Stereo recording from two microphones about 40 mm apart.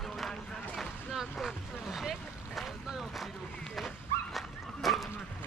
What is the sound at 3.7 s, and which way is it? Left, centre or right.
Dog, centre.